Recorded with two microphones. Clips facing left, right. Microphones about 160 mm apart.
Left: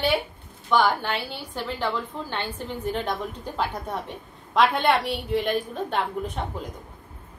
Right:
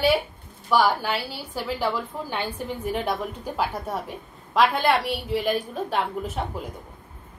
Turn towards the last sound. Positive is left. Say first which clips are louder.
# right 1 dB
turn(degrees=-5)  # may be behind; listen again after turning